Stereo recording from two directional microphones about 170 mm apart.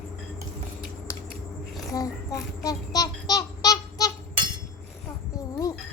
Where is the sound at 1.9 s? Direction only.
20° left (ahead or behind).